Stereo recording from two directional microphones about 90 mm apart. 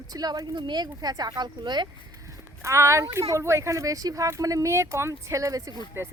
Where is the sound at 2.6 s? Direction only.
35° right (ahead or behind).